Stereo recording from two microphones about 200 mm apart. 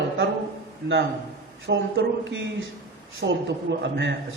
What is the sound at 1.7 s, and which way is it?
A man's voice, 65° right (ahead or behind).